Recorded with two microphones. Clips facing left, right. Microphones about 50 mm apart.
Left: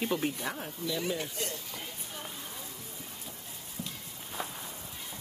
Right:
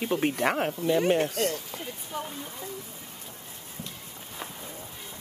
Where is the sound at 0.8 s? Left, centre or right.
Right.